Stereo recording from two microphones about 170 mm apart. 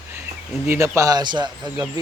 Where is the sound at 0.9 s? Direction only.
20° right (ahead or behind).